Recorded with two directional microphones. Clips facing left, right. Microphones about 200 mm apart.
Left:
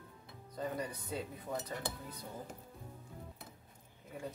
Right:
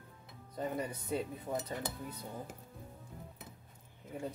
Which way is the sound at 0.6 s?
25° right (ahead or behind).